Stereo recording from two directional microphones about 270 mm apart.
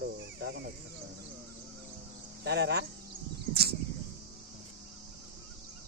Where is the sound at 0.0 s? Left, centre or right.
Right.